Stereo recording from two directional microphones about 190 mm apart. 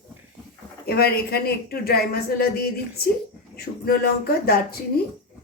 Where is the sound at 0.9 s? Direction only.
55° left (ahead or behind).